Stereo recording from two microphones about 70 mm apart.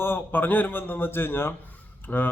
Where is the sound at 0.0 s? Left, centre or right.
Left.